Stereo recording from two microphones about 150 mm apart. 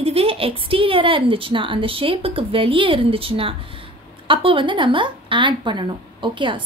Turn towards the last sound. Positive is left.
turn(degrees=-35)  # may be behind; listen again after turning